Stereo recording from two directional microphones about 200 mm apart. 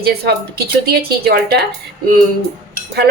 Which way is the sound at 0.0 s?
50° right (ahead or behind).